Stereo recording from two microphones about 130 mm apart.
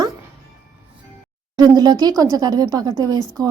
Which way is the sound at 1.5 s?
30° right (ahead or behind).